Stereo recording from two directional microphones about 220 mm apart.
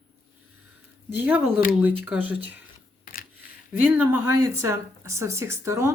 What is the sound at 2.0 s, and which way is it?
Speech, 5° right (ahead or behind).